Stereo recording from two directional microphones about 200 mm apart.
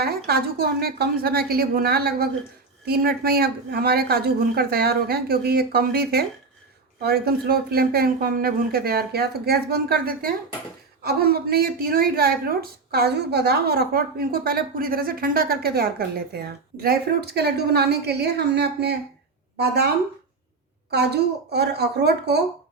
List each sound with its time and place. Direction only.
0.0 s a woman's voice: 50° right (ahead or behind)
20.9 s a woman's voice: 55° right (ahead or behind)